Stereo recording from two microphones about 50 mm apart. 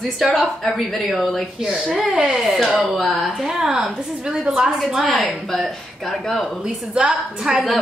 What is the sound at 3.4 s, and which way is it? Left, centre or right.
A woman's voice, centre.